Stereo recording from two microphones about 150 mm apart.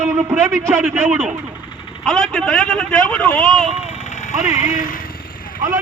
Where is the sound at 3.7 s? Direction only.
45° left (ahead or behind).